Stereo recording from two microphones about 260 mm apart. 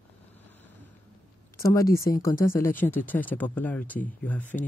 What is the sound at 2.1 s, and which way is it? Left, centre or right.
Speech, centre.